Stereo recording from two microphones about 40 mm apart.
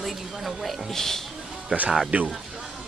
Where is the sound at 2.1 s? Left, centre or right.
Right.